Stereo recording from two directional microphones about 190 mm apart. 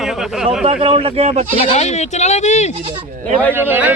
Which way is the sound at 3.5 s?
10° right (ahead or behind).